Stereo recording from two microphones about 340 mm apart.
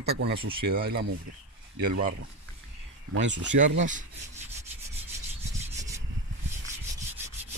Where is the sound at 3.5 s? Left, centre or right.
Right.